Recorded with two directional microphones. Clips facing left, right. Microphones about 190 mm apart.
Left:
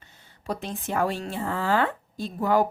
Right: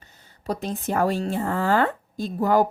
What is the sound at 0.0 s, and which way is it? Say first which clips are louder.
A woman's voice: right 5 dB; 40° right (ahead or behind).